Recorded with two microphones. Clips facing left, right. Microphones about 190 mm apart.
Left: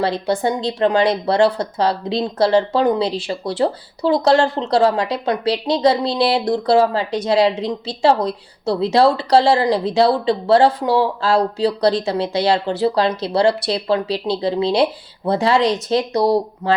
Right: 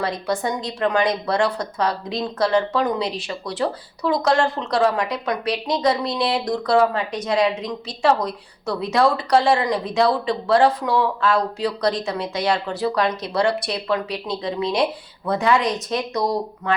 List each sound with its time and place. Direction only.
0.0 s speech: 30° left (ahead or behind)